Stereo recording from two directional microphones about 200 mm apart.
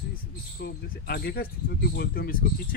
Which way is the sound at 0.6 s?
50° left (ahead or behind).